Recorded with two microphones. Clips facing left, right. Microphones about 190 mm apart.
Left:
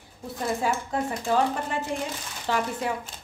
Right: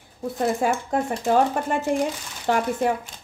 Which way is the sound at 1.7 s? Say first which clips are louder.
Right 7 dB; 50° right (ahead or behind).